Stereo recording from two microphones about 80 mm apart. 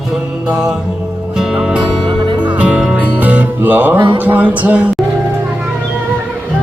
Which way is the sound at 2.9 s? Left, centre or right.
Centre.